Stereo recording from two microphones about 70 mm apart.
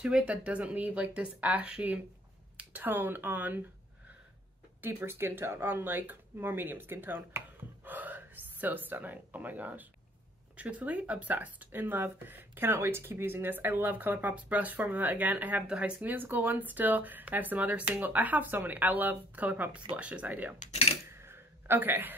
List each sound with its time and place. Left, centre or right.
0.0 s speech: centre
4.8 s speech: right
7.8 s gasp: right
10.5 s speech: centre
16.0 s speech: right
21.1 s a sound: right